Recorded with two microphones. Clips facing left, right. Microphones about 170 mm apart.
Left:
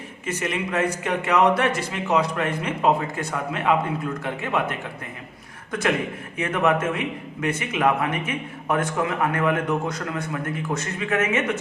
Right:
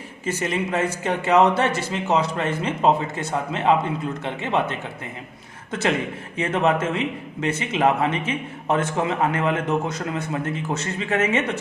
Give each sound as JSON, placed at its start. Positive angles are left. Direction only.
{"t": 0.3, "sound": "a man's voice", "side_deg": -30}
{"t": 6.3, "sound": "a man's voice", "side_deg": -25}